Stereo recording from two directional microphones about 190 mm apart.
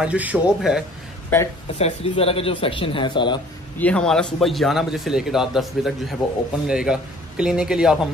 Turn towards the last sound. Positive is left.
turn(degrees=-5)  # may be behind; listen again after turning